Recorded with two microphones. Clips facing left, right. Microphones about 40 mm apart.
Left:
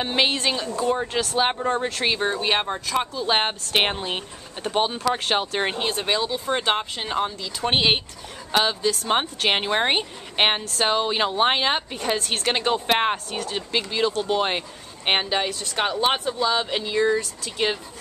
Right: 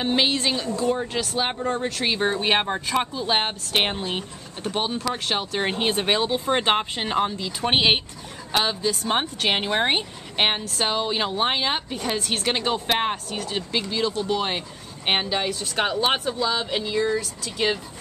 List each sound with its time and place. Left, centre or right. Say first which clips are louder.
0.0 s a woman's voice: even; centre
2.1 s speech: right 1 dB; centre
3.3 s a woman's voice: left 1 dB; centre
5.8 s speech: right 2 dB; centre
8.5 s a woman's voice: left 2 dB; centre
13.4 s speech: even; centre
13.7 s a woman's voice: left 2 dB; centre
16.3 s a woman's voice: left 2 dB; centre